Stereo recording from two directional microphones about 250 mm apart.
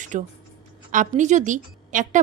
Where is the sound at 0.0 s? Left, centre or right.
Right.